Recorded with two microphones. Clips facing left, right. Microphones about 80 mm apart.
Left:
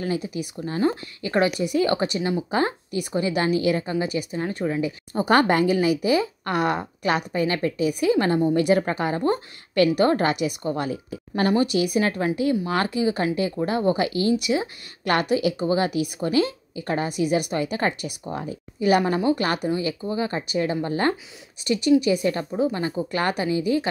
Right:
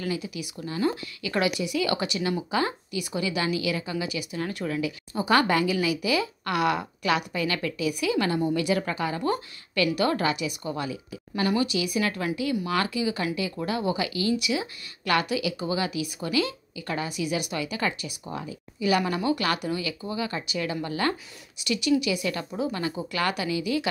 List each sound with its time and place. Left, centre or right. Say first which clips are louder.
0.0 s a woman's voice: left 4 dB; left
4.4 s speech: left 3 dB; left
5.1 s a woman's voice: left 4 dB; left
19.0 s a woman's voice: left 4 dB; left